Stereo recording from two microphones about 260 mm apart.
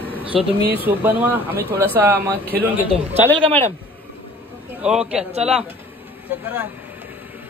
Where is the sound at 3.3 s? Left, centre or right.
Right.